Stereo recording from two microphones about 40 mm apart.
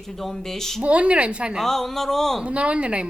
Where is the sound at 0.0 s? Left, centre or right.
Centre.